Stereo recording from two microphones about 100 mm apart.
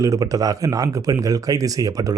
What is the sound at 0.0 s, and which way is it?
A man's voice, 35° right (ahead or behind).